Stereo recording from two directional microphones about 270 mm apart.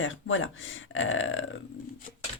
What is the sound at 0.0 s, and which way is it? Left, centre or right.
A woman's voice, left.